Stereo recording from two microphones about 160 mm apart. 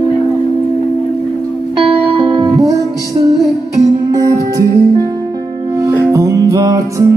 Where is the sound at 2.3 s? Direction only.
25° right (ahead or behind).